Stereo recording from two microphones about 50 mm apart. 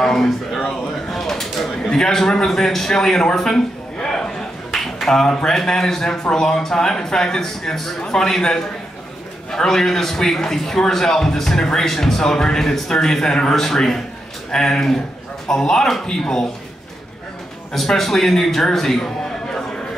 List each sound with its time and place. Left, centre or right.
0.0 s a sound: centre
4.7 s a man's voice: centre
17.7 s a man's voice: centre